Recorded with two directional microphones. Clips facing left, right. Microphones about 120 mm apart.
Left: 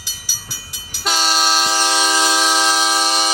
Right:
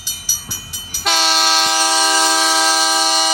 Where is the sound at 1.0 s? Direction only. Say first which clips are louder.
Right 1 dB; 5° right (ahead or behind).